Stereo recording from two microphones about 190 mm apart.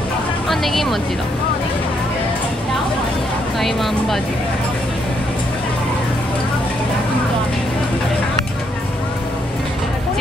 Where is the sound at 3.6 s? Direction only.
Centre (ahead or behind).